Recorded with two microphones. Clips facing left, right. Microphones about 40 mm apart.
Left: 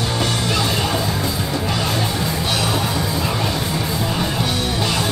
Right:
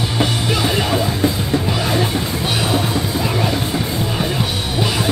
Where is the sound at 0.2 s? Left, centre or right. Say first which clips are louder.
Right 4 dB; centre.